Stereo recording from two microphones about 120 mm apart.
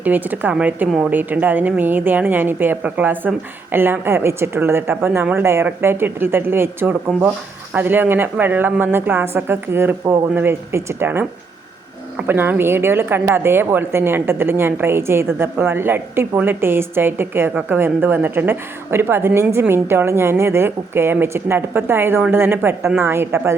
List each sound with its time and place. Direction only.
0.0 s a woman's voice: 15° right (ahead or behind)